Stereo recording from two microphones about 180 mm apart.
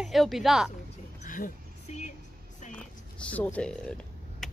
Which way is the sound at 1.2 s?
50° left (ahead or behind).